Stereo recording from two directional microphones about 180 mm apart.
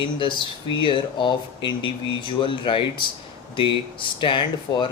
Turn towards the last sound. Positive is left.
turn(degrees=25)  # may be behind; listen again after turning